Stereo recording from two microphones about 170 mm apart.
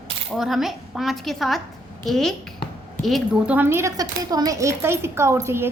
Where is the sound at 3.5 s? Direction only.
15° right (ahead or behind).